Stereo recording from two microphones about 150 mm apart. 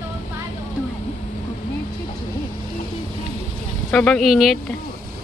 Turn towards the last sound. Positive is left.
turn(degrees=0)  # may be behind; listen again after turning